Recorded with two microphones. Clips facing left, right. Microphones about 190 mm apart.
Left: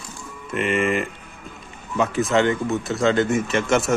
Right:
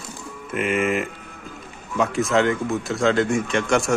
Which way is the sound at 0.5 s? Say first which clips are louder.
Even; 5° right (ahead or behind).